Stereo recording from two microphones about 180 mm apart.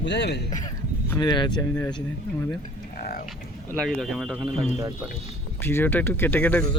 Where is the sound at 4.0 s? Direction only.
Centre (ahead or behind).